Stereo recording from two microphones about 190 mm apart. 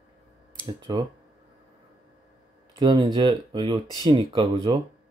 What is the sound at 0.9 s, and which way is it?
Speech, 25° right (ahead or behind).